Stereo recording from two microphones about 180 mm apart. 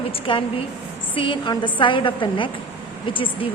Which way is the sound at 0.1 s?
30° left (ahead or behind).